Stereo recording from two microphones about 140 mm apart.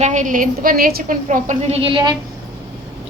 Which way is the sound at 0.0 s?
60° right (ahead or behind).